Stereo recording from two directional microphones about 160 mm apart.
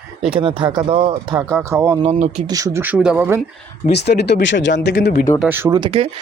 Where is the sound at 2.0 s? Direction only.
45° right (ahead or behind).